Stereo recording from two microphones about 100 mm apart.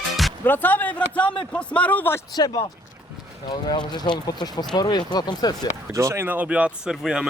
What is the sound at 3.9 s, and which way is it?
Speech, 45° left (ahead or behind).